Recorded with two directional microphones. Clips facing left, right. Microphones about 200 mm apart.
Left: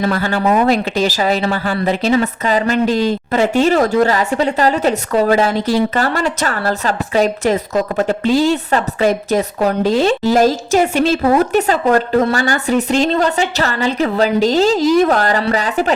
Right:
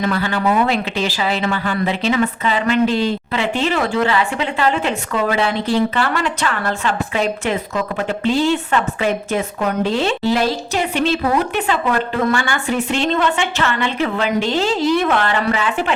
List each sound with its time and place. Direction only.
0.0 s a woman's voice: 40° left (ahead or behind)